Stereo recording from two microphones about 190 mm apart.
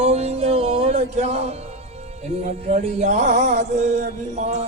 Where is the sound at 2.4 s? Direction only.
40° right (ahead or behind).